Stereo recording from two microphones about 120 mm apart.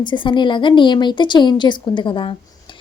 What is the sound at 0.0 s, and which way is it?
A woman's voice, 40° left (ahead or behind).